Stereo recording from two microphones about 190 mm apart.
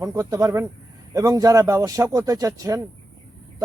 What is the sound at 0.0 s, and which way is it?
Speech, 15° right (ahead or behind).